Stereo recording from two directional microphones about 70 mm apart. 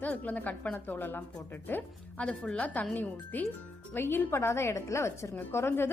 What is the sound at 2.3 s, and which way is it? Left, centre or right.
A woman's voice, centre.